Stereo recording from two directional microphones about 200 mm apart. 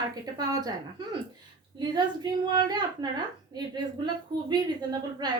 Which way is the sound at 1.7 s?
20° right (ahead or behind).